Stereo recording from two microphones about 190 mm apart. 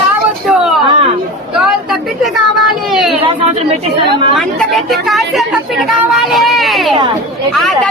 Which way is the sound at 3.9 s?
25° right (ahead or behind).